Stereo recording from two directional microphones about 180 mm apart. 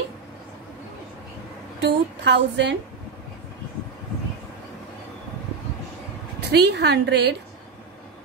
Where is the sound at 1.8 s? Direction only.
75° right (ahead or behind).